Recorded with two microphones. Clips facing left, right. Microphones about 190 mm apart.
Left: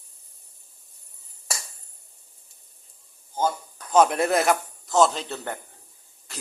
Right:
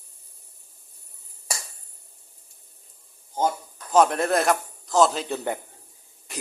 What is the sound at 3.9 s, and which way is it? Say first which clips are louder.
A man's voice: even; 5° left (ahead or behind).